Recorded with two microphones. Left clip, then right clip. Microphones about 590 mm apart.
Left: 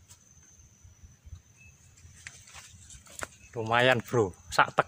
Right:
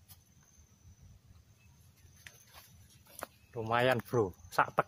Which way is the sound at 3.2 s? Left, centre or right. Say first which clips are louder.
Left 5 dB; right.